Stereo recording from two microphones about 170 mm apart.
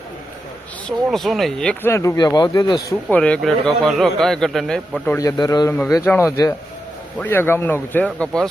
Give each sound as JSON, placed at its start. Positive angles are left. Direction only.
{"t": 0.9, "sound": "a man's voice", "side_deg": 0}
{"t": 1.9, "sound": "speech", "side_deg": 20}
{"t": 3.1, "sound": "a man's voice", "side_deg": 5}
{"t": 5.0, "sound": "a man's voice", "side_deg": 20}